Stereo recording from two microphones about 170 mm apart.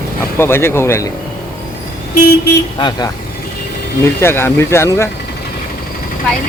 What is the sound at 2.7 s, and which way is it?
Speech, 25° left (ahead or behind).